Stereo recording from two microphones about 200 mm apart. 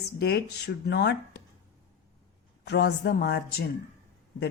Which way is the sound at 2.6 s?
60° left (ahead or behind).